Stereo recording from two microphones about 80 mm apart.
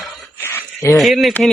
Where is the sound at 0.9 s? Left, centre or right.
Centre.